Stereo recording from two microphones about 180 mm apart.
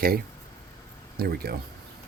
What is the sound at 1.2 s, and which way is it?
Speech, 60° right (ahead or behind).